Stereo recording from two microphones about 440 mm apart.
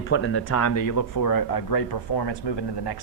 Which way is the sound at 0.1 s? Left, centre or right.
Left.